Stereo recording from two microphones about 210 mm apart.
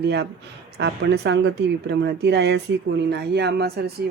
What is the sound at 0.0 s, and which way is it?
Speech, 55° right (ahead or behind).